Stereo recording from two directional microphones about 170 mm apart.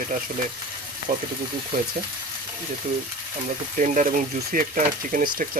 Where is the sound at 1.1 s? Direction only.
55° right (ahead or behind).